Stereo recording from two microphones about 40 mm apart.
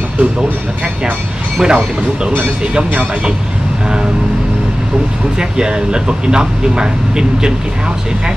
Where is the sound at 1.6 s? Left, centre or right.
Right.